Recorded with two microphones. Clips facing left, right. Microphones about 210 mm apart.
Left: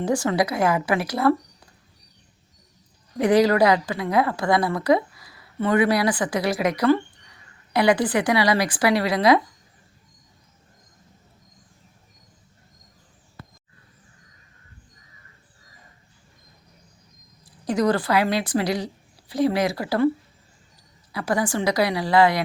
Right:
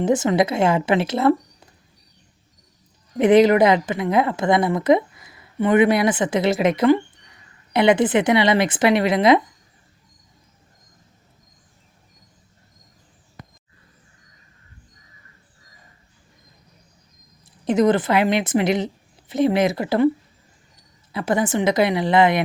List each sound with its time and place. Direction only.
0.0 s a woman's voice: 20° right (ahead or behind)
3.2 s a woman's voice: 20° right (ahead or behind)
13.4 s a sound: 15° right (ahead or behind)
17.4 s a woman's voice: 20° right (ahead or behind)
21.1 s a woman's voice: 25° right (ahead or behind)